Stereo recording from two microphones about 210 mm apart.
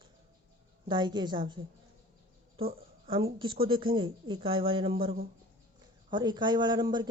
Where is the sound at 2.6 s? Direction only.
45° right (ahead or behind).